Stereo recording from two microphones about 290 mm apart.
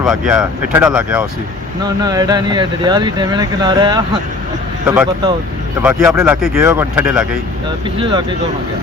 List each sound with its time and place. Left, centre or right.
0.0 s speech: centre
7.9 s speech: centre